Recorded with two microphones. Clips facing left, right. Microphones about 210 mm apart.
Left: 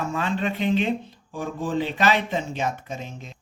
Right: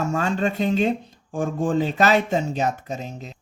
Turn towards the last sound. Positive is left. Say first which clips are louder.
# right 3 dB
turn(degrees=-40)  # may be behind; listen again after turning